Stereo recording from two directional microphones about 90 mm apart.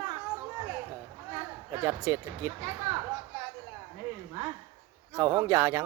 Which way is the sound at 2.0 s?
35° right (ahead or behind).